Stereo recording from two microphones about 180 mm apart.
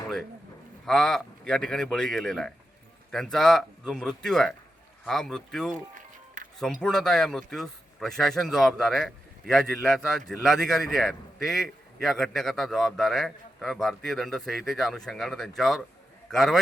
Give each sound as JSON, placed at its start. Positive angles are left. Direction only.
{"t": 0.9, "sound": "speech", "side_deg": 5}
{"t": 5.7, "sound": "music", "side_deg": -45}
{"t": 6.8, "sound": "speech", "side_deg": 5}